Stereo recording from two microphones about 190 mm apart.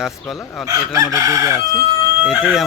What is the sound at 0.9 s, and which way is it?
Chicken, 20° right (ahead or behind).